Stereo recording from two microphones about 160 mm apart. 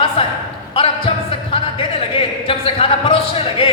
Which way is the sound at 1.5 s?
35° left (ahead or behind).